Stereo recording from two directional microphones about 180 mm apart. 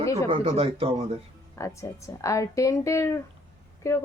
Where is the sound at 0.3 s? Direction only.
35° right (ahead or behind).